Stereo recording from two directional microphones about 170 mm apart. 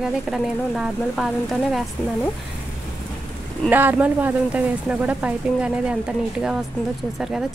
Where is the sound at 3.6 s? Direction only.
10° right (ahead or behind).